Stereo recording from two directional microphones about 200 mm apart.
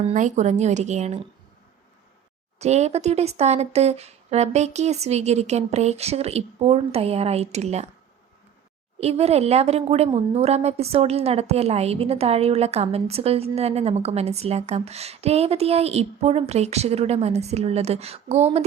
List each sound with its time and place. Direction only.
0.1 s a woman's voice: 35° right (ahead or behind)
2.6 s a woman's voice: 35° right (ahead or behind)
9.0 s a woman's voice: 30° right (ahead or behind)